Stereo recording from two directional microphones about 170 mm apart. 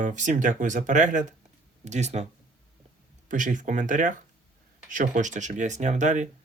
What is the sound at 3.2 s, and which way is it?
Speech, 50° right (ahead or behind).